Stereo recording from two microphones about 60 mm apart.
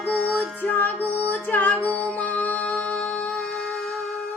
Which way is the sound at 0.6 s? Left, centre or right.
Left.